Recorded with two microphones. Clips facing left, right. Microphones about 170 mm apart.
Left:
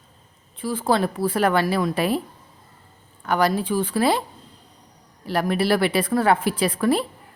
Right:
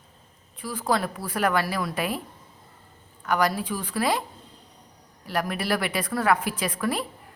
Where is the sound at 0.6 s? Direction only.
30° left (ahead or behind).